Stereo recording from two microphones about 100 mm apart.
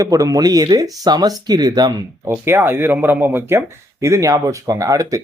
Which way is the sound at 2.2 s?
25° right (ahead or behind).